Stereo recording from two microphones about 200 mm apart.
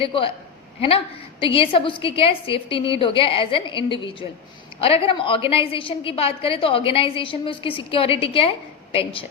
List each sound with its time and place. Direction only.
0.0 s a woman's voice: 25° left (ahead or behind)